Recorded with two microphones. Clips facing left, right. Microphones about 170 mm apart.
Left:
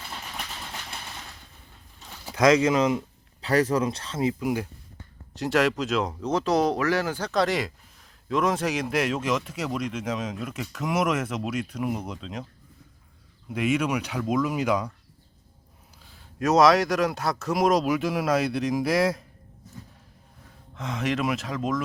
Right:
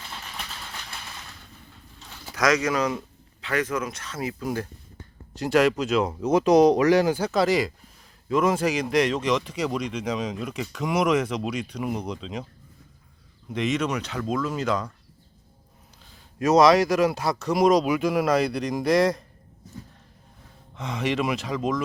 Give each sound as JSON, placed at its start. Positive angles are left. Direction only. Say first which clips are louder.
{"t": 2.3, "sound": "speech", "louder": "left 3 dB", "side_deg": 25}
{"t": 3.4, "sound": "speech", "louder": "left 4 dB", "side_deg": 35}
{"t": 4.4, "sound": "speech", "louder": "left 2 dB", "side_deg": 15}
{"t": 5.3, "sound": "speech", "louder": "right 3 dB", "side_deg": 0}
{"t": 13.5, "sound": "speech", "louder": "left 1 dB", "side_deg": 10}
{"t": 16.4, "sound": "speech", "louder": "right 2 dB", "side_deg": 0}
{"t": 20.7, "sound": "speech", "louder": "right 1 dB", "side_deg": 0}